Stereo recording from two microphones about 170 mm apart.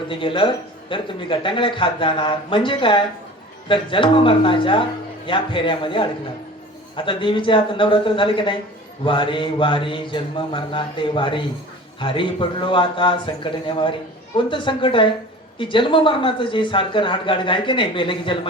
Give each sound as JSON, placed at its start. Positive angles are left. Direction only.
{"t": 0.1, "sound": "speech", "side_deg": 30}